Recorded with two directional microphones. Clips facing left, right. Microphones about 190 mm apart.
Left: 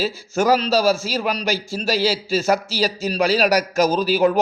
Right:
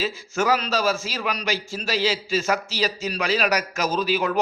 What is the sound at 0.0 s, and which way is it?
A man's voice, 40° left (ahead or behind).